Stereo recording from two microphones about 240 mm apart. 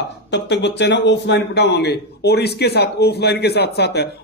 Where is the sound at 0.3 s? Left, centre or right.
Left.